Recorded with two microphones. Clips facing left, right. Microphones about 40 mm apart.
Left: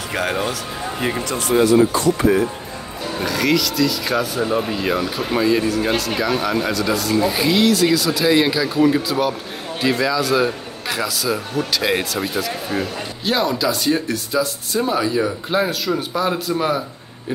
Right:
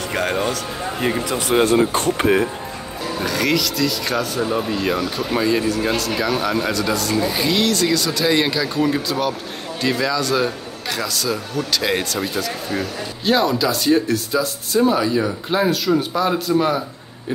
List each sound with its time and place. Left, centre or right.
0.1 s a man's voice: centre
1.5 s speech: right
3.2 s a man's voice: centre